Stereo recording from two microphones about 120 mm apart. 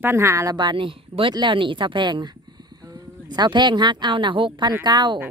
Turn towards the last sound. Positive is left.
turn(degrees=-40)  # may be behind; listen again after turning